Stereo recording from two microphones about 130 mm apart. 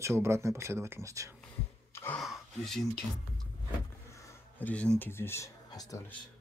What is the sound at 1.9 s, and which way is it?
Gasp, 15° left (ahead or behind).